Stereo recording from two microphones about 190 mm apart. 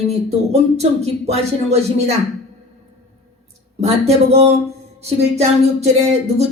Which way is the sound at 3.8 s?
35° right (ahead or behind).